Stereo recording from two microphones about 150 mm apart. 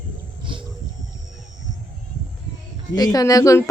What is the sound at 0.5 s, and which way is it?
Wild animals, 35° right (ahead or behind).